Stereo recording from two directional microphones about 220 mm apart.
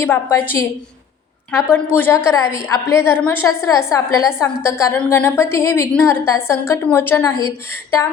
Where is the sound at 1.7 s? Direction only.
10° left (ahead or behind).